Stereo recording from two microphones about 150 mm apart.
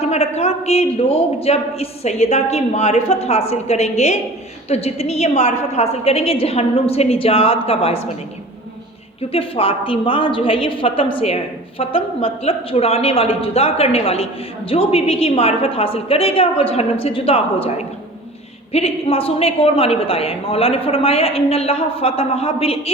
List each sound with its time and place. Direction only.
0.0 s a man's voice: 45° left (ahead or behind)
9.3 s a woman's voice: 40° left (ahead or behind)